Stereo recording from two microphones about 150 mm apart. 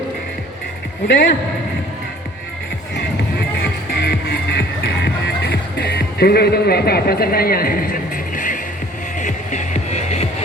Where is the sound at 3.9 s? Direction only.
90° left.